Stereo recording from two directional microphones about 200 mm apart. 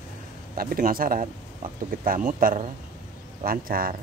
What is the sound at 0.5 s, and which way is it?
Speech, 45° right (ahead or behind).